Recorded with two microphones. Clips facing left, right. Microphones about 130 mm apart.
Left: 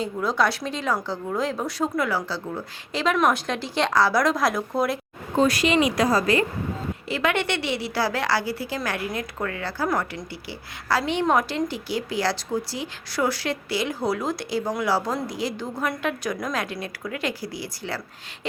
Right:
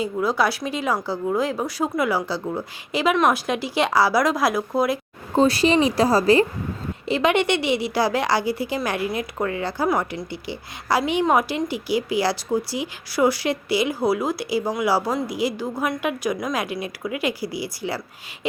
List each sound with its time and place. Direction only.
0.0 s a woman's voice: 5° right (ahead or behind)
5.4 s speech: 30° right (ahead or behind)
7.1 s a woman's voice: 20° right (ahead or behind)